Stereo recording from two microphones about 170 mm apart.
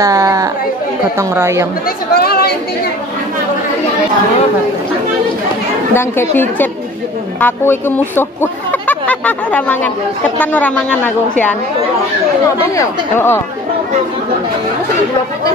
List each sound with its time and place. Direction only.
0.0 s chatter: 20° right (ahead or behind)
1.1 s a woman's voice: 15° right (ahead or behind)
2.1 s speech: 65° left (ahead or behind)
5.9 s a woman's voice: 10° left (ahead or behind)
12.7 s a woman's voice: 15° left (ahead or behind)